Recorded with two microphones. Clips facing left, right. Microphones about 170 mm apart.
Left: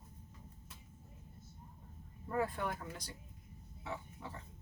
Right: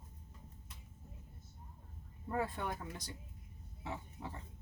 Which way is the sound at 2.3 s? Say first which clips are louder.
Left 1 dB; 25° right (ahead or behind).